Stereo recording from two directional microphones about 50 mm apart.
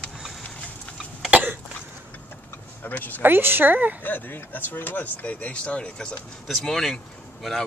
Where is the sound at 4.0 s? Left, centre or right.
Left.